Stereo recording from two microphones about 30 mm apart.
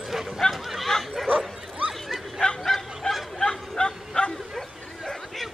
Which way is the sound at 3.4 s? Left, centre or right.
Left.